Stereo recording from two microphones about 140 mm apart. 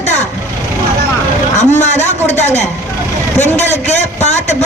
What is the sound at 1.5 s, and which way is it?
A man's voice, 55° left (ahead or behind).